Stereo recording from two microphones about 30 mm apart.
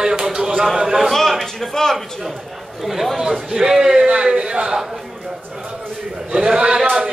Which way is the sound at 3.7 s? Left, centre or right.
Centre.